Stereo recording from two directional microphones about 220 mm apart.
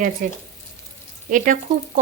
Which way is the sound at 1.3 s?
35° right (ahead or behind).